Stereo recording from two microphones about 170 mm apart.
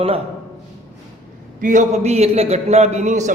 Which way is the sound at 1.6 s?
45° right (ahead or behind).